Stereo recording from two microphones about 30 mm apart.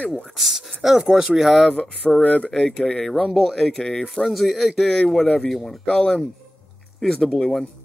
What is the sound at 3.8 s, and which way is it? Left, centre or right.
Speech, left.